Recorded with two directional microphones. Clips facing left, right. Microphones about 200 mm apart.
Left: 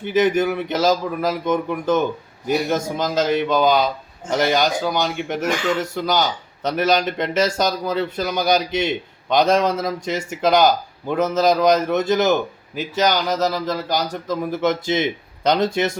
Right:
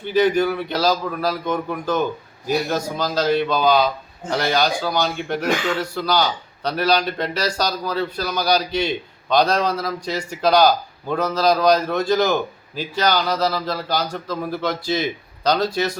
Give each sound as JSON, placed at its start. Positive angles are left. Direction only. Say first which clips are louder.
{"t": 0.0, "sound": "speech", "louder": "even", "side_deg": 20}